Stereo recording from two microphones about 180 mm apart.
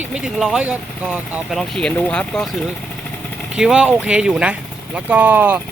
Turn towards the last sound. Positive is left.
turn(degrees=-10)  # may be behind; listen again after turning